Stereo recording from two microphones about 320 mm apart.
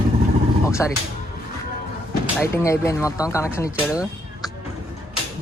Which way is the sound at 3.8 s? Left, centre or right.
Centre.